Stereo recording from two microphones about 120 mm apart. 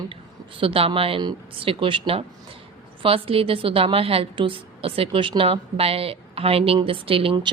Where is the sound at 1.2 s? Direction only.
35° right (ahead or behind).